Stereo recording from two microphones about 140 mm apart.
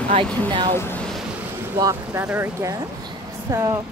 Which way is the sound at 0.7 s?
15° left (ahead or behind).